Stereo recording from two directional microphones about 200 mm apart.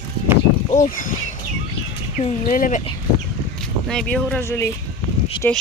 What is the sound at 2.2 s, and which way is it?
Speech, 40° left (ahead or behind).